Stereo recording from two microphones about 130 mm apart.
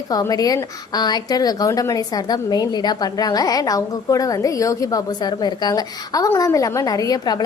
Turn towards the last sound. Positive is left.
turn(degrees=30)  # may be behind; listen again after turning